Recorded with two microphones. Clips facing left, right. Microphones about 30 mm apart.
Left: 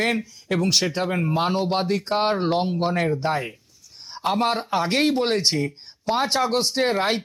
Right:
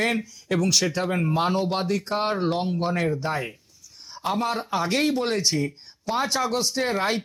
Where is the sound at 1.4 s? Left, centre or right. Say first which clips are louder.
Left 3 dB; centre.